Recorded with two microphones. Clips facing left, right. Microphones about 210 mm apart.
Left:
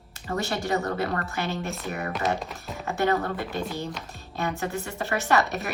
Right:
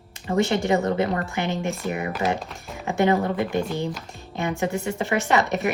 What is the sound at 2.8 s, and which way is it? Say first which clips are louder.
A woman's voice: right 4 dB; 15° right (ahead or behind).